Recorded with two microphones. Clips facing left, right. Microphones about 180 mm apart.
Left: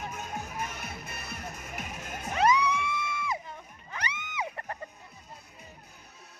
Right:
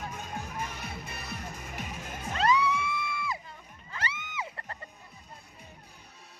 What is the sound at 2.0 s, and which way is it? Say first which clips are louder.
Music: left 2 dB; 15° left (ahead or behind).